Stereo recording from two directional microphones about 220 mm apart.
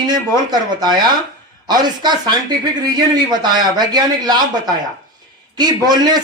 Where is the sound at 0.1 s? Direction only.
20° right (ahead or behind).